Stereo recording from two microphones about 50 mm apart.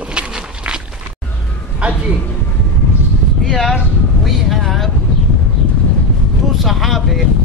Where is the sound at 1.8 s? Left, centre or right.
Right.